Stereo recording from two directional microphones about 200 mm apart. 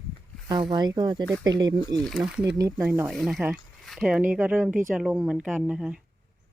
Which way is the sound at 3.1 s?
Centre (ahead or behind).